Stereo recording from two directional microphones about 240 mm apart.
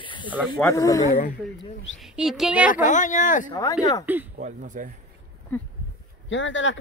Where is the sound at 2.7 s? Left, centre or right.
Left.